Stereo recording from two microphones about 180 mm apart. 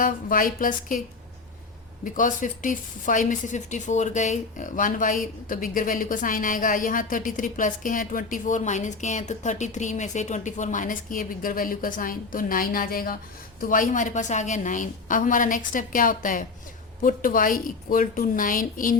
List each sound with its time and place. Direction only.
0.0 s speech: 50° left (ahead or behind)
2.0 s speech: 45° left (ahead or behind)